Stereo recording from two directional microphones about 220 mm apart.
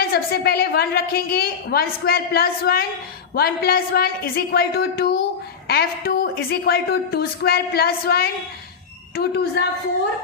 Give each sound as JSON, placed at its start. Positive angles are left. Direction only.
{"t": 0.1, "sound": "a woman's voice", "side_deg": 45}